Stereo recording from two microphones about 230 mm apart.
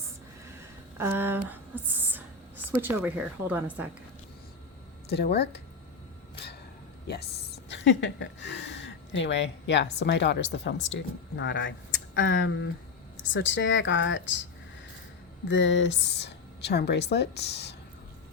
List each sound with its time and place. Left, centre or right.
0.9 s speech: centre
5.0 s speech: left
7.1 s a woman's voice: left
15.4 s speech: left